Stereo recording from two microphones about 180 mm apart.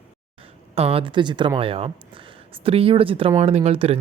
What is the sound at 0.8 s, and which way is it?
Speech, 30° right (ahead or behind).